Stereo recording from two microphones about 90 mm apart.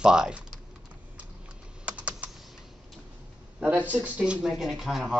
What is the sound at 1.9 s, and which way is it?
Typing, 15° right (ahead or behind).